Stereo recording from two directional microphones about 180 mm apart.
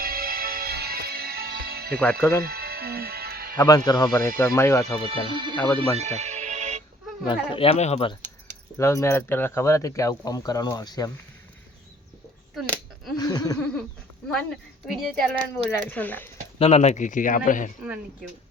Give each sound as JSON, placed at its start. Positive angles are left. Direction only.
{"t": 0.0, "sound": "music", "side_deg": -55}
{"t": 3.6, "sound": "speech", "side_deg": 20}
{"t": 5.0, "sound": "speech", "side_deg": -30}
{"t": 5.5, "sound": "speech", "side_deg": 10}
{"t": 6.0, "sound": "music", "side_deg": -40}
{"t": 7.3, "sound": "speech", "side_deg": 30}
{"t": 8.8, "sound": "speech", "side_deg": 15}
{"t": 13.1, "sound": "a sound", "side_deg": 20}
{"t": 14.3, "sound": "speech", "side_deg": 5}
{"t": 16.6, "sound": "speech", "side_deg": 35}
{"t": 17.8, "sound": "speech", "side_deg": -5}